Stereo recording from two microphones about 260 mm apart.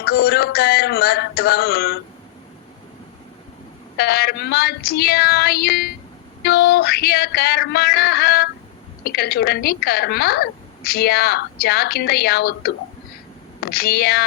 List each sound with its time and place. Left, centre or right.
0.0 s a woman's voice: left
3.9 s a woman's voice: left